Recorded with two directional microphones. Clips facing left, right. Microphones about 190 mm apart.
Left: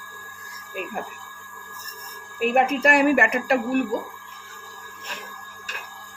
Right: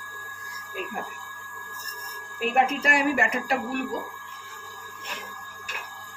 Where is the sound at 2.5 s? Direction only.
60° left (ahead or behind).